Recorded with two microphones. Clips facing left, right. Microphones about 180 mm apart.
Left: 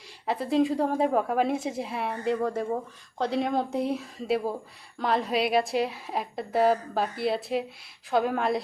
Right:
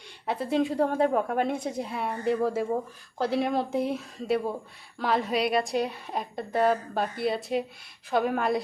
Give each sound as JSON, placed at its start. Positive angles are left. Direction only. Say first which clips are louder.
{"t": 0.3, "sound": "a woman's voice", "louder": "left 2 dB", "side_deg": 0}